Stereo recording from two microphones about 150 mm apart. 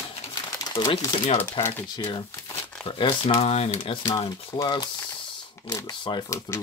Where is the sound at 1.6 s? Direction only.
40° left (ahead or behind).